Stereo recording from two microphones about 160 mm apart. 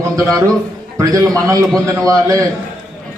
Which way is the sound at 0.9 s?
20° right (ahead or behind).